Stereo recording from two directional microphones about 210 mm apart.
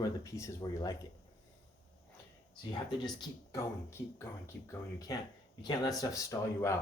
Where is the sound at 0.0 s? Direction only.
15° left (ahead or behind).